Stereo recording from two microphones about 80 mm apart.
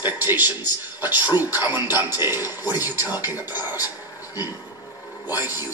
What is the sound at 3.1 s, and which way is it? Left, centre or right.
Speech, left.